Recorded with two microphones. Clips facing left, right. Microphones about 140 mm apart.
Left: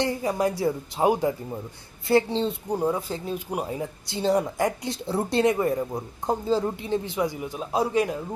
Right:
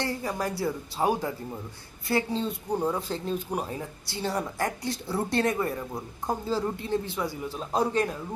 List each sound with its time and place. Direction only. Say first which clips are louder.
0.0 s speech: left 6 dB; 20° left (ahead or behind)
2.7 s speech: even; 10° left (ahead or behind)